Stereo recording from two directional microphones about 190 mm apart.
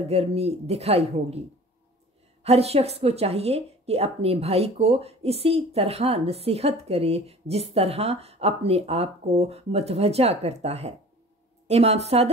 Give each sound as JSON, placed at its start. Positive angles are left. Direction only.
{"t": 0.1, "sound": "speech", "side_deg": -35}
{"t": 2.4, "sound": "speech", "side_deg": -35}